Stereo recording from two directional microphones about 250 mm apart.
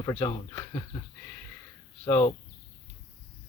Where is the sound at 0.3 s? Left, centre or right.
Left.